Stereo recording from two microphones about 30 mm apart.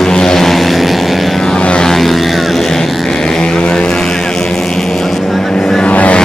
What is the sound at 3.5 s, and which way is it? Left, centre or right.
Vehicle, left.